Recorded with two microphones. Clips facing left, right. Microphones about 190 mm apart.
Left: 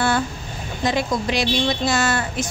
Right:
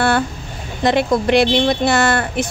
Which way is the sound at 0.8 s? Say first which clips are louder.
Right 6 dB; 60° right (ahead or behind).